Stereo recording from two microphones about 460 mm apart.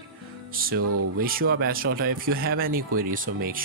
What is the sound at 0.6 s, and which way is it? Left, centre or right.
Speech, right.